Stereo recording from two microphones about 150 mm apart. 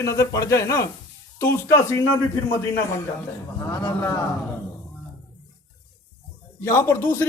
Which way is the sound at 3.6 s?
20° left (ahead or behind).